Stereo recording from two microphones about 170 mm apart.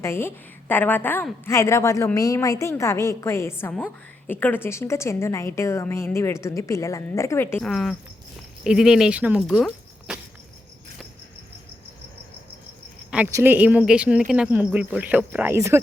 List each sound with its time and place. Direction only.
0.0 s a woman's voice: 15° left (ahead or behind)
7.6 s speech: centre (ahead or behind)
13.1 s cricket: 10° right (ahead or behind)
13.3 s speech: 10° right (ahead or behind)